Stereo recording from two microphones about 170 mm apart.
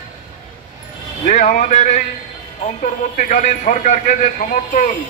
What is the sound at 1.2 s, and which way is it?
A man's voice, 50° left (ahead or behind).